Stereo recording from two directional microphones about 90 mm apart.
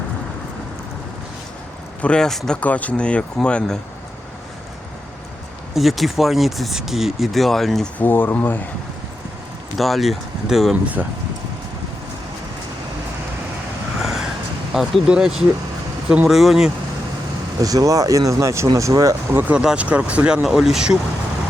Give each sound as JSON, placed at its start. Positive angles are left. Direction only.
{"t": 2.0, "sound": "speech", "side_deg": 10}
{"t": 5.7, "sound": "speech", "side_deg": 0}
{"t": 7.9, "sound": "speech", "side_deg": 20}
{"t": 9.7, "sound": "speech", "side_deg": 0}
{"t": 14.0, "sound": "vehicle", "side_deg": -5}
{"t": 14.7, "sound": "speech", "side_deg": -5}
{"t": 17.6, "sound": "speech", "side_deg": -40}
{"t": 19.3, "sound": "speech", "side_deg": -20}